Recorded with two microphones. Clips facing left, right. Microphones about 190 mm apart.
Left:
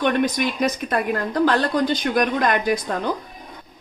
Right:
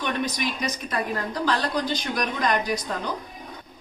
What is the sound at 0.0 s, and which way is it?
A woman's voice, 55° left (ahead or behind).